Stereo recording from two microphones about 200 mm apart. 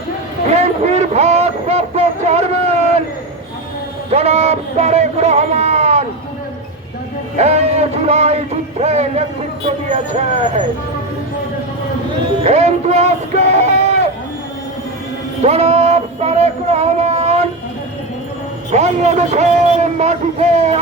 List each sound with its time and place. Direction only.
0.5 s a sound: 35° right (ahead or behind)
4.1 s speech: 30° right (ahead or behind)
7.3 s a sound: 35° right (ahead or behind)
8.8 s speech: 35° right (ahead or behind)
10.3 s speech: 35° right (ahead or behind)
12.4 s music: 30° right (ahead or behind)
15.4 s music: 30° right (ahead or behind)
18.7 s a man's voice: 35° right (ahead or behind)